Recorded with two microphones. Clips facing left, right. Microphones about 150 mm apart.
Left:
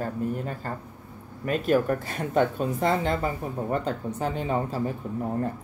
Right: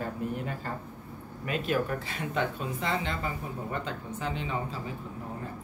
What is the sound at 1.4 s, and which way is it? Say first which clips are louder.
Speech: left 6 dB; 45° left (ahead or behind).